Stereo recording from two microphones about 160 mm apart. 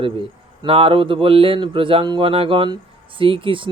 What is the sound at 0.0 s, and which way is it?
Speech, 35° right (ahead or behind).